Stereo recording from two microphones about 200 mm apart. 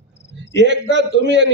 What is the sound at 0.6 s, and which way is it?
Speech, 65° right (ahead or behind).